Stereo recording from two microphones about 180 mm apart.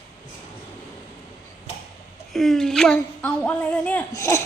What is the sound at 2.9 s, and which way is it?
Child singing, 5° left (ahead or behind).